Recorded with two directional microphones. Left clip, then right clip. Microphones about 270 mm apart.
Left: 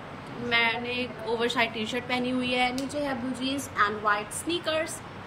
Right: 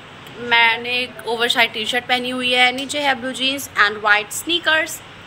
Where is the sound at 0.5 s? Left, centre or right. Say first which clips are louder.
Right 10 dB; centre.